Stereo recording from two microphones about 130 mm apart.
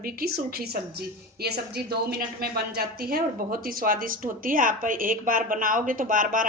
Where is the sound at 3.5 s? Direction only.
90° right.